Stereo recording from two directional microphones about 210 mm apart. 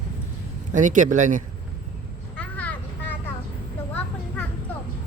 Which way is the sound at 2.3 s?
5° left (ahead or behind).